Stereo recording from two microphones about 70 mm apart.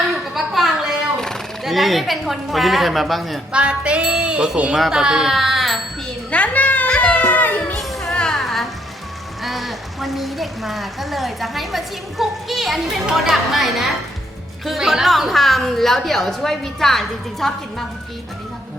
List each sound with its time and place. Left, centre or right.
0.3 s a sound: centre
1.6 s a woman's voice: centre
3.5 s music: centre
4.9 s speech: centre
6.3 s children playing: centre
6.9 s cat: centre
7.8 s music: centre
9.4 s a woman's voice: centre